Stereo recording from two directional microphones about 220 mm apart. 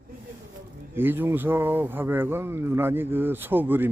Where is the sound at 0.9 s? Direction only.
10° right (ahead or behind).